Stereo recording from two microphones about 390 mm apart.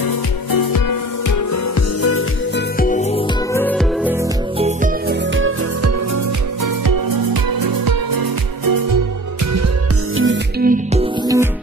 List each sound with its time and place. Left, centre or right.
0.0 s music: left
2.8 s music: centre
3.5 s music: centre
4.6 s music: centre
7.6 s music: right
10.1 s music: right